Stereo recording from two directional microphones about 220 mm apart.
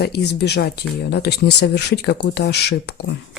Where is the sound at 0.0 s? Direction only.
50° left (ahead or behind).